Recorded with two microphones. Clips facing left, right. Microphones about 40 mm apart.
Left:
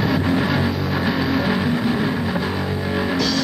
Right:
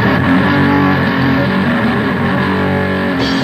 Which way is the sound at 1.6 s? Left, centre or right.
Right.